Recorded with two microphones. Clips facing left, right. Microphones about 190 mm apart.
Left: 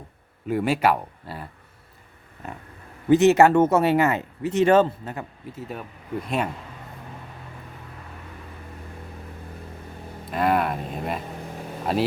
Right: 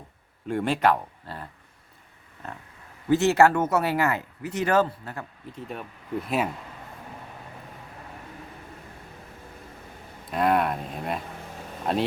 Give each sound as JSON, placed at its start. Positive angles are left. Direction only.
{"t": 0.4, "sound": "speech", "side_deg": 5}
{"t": 5.5, "sound": "speech", "side_deg": 5}
{"t": 10.3, "sound": "speech", "side_deg": 0}